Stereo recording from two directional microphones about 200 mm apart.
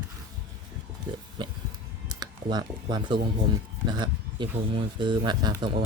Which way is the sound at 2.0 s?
20° right (ahead or behind).